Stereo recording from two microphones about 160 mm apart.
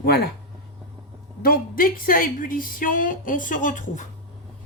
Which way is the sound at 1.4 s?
65° left (ahead or behind).